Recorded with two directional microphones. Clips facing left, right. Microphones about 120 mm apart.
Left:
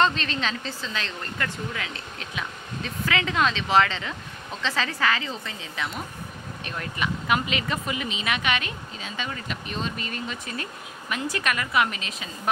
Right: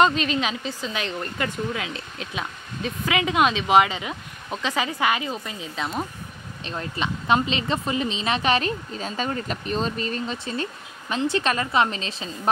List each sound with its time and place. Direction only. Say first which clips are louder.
0.0 s speech: right 4 dB; 10° right (ahead or behind); by 12.3 s 30° right (ahead or behind)